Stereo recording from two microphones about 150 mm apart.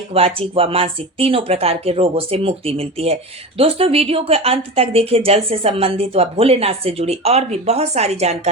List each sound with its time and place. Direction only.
0.1 s speech: 40° right (ahead or behind)